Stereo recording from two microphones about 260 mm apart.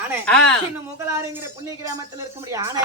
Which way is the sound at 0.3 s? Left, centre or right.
Centre.